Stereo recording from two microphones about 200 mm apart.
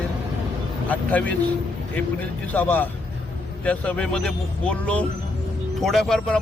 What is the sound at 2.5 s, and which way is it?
A man's voice, 10° left (ahead or behind).